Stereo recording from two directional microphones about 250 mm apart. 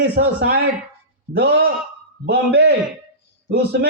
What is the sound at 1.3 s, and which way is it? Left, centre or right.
A man's voice, right.